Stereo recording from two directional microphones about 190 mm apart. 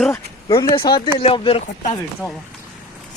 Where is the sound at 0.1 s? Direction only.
20° left (ahead or behind).